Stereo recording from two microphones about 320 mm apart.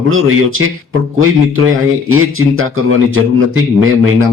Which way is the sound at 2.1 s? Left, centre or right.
Right.